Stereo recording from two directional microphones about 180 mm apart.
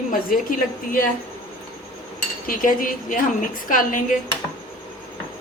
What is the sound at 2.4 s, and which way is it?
A woman's voice, 50° left (ahead or behind).